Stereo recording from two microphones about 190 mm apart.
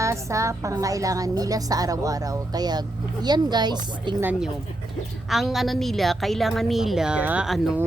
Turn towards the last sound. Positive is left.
turn(degrees=-5)  # may be behind; listen again after turning